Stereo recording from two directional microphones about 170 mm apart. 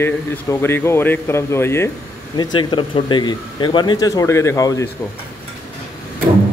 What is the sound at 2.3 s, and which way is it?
Speech, 30° left (ahead or behind).